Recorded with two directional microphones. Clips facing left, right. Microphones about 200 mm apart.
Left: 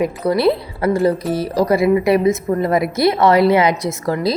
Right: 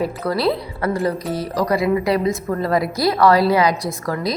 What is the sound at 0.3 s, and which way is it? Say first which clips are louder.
A woman's voice: left 5 dB; 25° left (ahead or behind).